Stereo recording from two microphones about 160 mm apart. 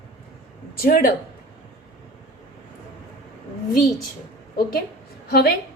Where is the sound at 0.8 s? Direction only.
65° left (ahead or behind).